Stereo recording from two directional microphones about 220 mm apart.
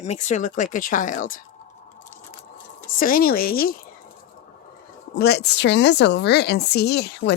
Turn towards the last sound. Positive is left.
turn(degrees=50)  # may be behind; listen again after turning